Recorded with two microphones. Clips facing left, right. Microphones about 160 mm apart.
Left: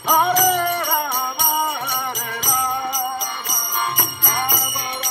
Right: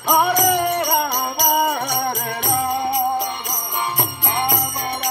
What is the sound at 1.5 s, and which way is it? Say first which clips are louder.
Music: right 5 dB; 50° right (ahead or behind).